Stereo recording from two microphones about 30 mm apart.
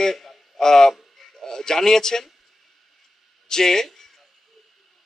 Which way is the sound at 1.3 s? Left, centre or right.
Centre.